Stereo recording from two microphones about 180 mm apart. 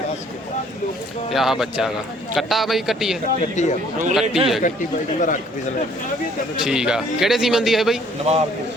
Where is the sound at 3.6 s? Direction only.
40° left (ahead or behind).